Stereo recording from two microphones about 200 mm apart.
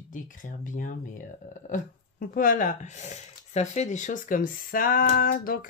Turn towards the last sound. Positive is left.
turn(degrees=45)  # may be behind; listen again after turning